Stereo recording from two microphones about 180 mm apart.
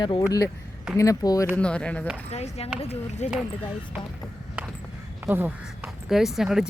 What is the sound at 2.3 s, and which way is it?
Speech, 35° left (ahead or behind).